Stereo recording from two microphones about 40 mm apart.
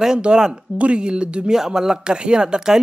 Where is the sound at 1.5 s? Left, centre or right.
Centre.